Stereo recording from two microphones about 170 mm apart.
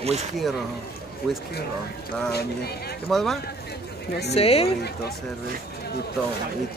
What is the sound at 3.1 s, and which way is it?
Speech, centre (ahead or behind).